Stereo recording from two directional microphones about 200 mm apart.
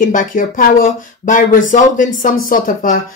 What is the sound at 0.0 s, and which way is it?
Speech, 40° left (ahead or behind).